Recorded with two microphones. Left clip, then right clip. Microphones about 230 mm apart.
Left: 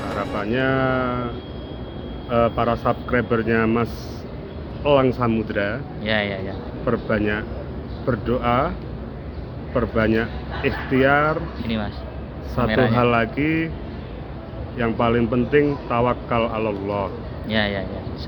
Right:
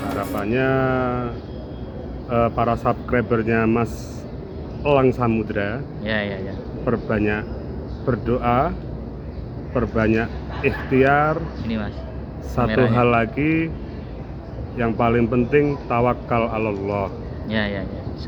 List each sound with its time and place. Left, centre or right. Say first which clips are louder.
0.2 s speech: even; centre
2.3 s speech: even; centre
6.0 s a man's voice: left 2 dB; centre
6.8 s speech: even; centre
9.7 s speech: even; centre
12.6 s a man's voice: even; centre
12.9 s speech: right 1 dB; centre
14.8 s speech: right 1 dB; centre
17.5 s a man's voice: left 2 dB; centre